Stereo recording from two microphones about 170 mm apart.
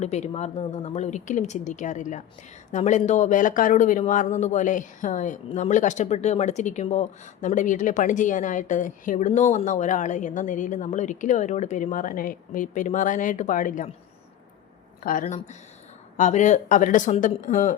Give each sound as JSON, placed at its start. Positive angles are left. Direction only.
{"t": 0.0, "sound": "speech", "side_deg": 40}
{"t": 15.0, "sound": "speech", "side_deg": 55}
{"t": 16.1, "sound": "speech", "side_deg": 45}